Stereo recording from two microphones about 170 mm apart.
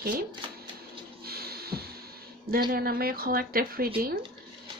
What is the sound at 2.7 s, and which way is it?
Speech, 60° right (ahead or behind).